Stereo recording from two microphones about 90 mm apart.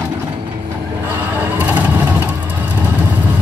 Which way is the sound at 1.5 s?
15° right (ahead or behind).